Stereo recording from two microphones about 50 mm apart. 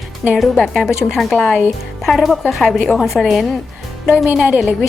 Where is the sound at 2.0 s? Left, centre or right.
Centre.